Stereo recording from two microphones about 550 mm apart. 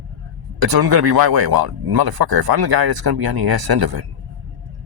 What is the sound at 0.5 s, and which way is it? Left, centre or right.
Speech, right.